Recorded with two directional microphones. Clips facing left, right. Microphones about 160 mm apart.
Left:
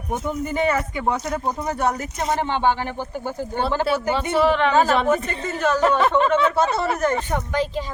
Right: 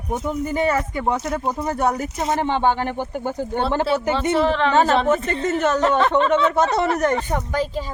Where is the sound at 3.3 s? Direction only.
20° right (ahead or behind).